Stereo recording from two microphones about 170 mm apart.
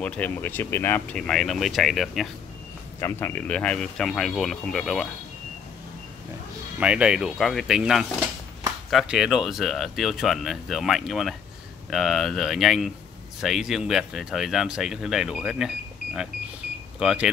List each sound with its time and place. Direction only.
0.0 s speech: 10° left (ahead or behind)
3.0 s speech: 15° left (ahead or behind)
6.8 s speech: 5° right (ahead or behind)